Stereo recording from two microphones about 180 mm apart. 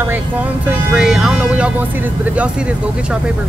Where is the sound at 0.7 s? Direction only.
5° right (ahead or behind).